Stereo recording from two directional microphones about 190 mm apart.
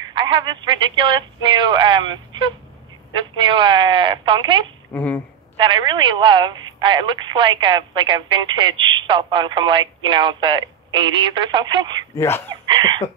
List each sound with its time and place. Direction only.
0.1 s speech: 25° right (ahead or behind)
4.9 s speech: 10° left (ahead or behind)
5.6 s speech: 25° right (ahead or behind)
12.2 s speech: 10° left (ahead or behind)
12.6 s a sound: 25° right (ahead or behind)